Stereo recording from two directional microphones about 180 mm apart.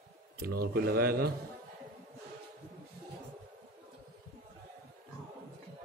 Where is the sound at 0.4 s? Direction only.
55° right (ahead or behind).